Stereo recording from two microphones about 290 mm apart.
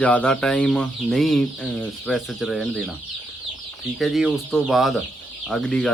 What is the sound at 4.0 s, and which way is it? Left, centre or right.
Speech, centre.